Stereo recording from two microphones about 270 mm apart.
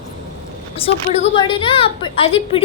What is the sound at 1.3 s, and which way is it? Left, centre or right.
A woman's voice, centre.